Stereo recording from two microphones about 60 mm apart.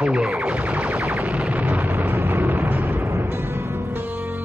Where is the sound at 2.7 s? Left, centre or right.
Right.